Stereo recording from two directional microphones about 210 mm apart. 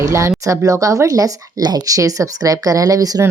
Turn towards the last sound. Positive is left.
turn(degrees=-15)  # may be behind; listen again after turning